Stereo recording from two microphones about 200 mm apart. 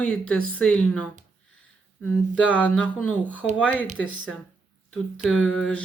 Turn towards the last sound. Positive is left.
turn(degrees=5)  # may be behind; listen again after turning